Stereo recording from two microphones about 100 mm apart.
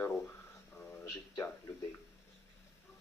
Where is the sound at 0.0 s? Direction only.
25° left (ahead or behind).